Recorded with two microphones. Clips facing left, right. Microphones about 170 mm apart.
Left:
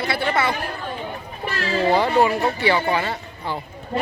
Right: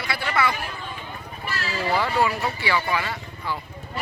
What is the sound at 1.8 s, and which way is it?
Speech, 25° left (ahead or behind).